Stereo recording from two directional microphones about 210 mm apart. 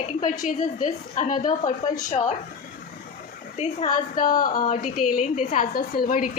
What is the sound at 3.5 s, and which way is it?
Speech, 30° left (ahead or behind).